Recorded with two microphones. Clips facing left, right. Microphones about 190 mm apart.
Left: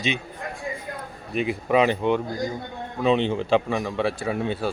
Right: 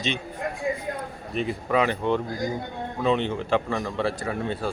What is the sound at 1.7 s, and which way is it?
A man's voice, 20° left (ahead or behind).